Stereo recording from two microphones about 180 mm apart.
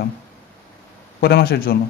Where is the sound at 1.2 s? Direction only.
60° left (ahead or behind).